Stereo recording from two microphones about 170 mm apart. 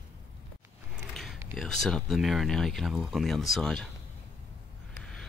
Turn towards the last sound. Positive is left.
turn(degrees=0)  # may be behind; listen again after turning